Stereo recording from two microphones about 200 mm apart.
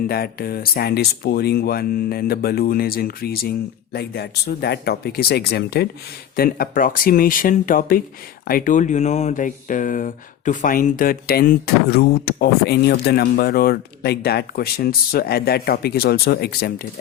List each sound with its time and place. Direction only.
0.1 s speech: 50° left (ahead or behind)